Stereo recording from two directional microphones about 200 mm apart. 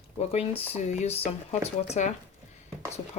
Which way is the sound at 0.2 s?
30° left (ahead or behind).